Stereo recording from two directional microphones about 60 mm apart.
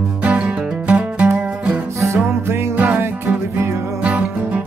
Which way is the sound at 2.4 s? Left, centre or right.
Right.